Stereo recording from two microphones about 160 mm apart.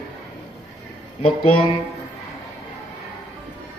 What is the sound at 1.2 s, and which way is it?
Speech, 35° left (ahead or behind).